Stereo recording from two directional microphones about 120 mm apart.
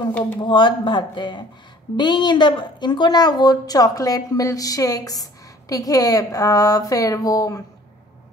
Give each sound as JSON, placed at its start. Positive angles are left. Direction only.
{"t": 0.4, "sound": "a woman's voice", "side_deg": 40}